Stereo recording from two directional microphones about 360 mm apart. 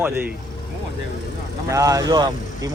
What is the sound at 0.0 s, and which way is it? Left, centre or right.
Speech, centre.